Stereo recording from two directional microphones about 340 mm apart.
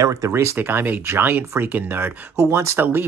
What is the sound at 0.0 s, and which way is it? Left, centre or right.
Speech, centre.